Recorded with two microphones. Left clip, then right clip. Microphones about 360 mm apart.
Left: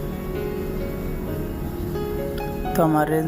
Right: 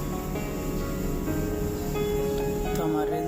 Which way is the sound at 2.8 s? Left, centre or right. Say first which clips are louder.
Left 10 dB; centre.